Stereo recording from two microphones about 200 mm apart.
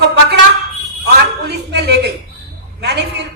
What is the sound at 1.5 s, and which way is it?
A woman's voice, 55° right (ahead or behind).